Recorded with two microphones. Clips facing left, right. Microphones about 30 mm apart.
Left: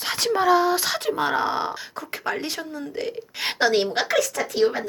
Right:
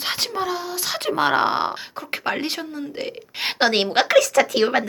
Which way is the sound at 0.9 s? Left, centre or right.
Right.